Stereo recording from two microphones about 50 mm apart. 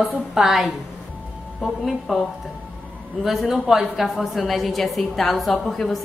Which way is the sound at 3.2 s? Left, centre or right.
Centre.